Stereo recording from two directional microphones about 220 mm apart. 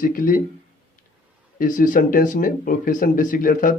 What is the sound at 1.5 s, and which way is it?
Speech, 35° left (ahead or behind).